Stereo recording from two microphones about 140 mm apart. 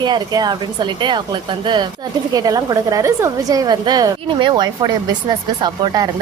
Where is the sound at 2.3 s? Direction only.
25° right (ahead or behind).